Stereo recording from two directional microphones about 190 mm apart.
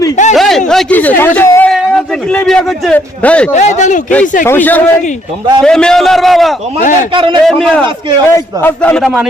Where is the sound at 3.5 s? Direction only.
40° left (ahead or behind).